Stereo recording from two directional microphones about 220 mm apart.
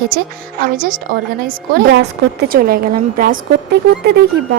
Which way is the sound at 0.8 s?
40° right (ahead or behind).